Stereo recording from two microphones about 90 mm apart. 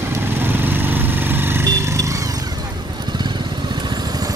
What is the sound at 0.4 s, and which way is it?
Vehicle, 25° right (ahead or behind).